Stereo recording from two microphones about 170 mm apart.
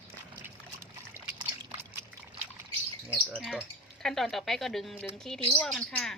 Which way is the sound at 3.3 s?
Centre (ahead or behind).